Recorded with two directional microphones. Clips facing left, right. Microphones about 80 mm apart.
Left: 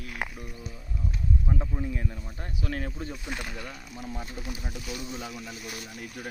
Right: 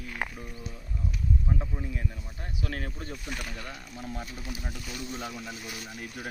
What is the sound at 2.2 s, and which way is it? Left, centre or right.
Speech, left.